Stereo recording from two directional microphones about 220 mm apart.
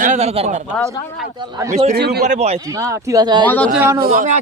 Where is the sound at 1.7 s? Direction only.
30° right (ahead or behind).